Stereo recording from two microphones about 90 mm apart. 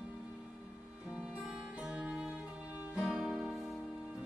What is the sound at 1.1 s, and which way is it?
Music, 10° right (ahead or behind).